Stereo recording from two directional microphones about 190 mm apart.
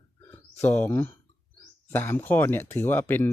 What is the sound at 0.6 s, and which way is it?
Speech, 10° left (ahead or behind).